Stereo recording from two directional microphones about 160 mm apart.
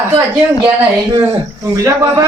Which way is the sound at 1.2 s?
20° right (ahead or behind).